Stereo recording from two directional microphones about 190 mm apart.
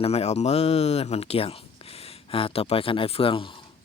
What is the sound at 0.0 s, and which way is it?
Speech, 30° left (ahead or behind).